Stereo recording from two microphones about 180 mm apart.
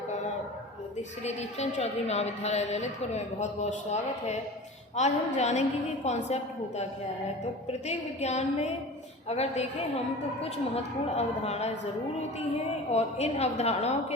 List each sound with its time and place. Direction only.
1.2 s a woman's voice: 40° left (ahead or behind)
11.1 s a woman's voice: 35° left (ahead or behind)
12.9 s a woman's voice: 35° left (ahead or behind)